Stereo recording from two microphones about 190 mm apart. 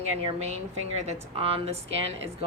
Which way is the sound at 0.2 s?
35° right (ahead or behind).